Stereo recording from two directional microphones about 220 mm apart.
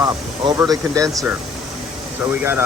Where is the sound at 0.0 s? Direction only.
15° right (ahead or behind).